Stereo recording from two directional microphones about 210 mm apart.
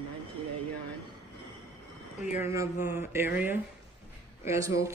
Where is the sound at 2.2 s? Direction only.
10° right (ahead or behind).